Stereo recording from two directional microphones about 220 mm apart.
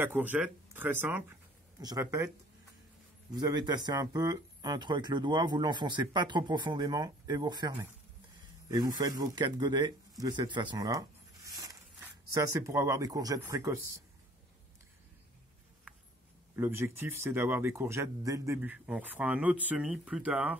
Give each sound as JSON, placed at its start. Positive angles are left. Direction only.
{"t": 0.0, "sound": "speech", "side_deg": -10}
{"t": 3.3, "sound": "speech", "side_deg": -20}
{"t": 16.5, "sound": "speech", "side_deg": -10}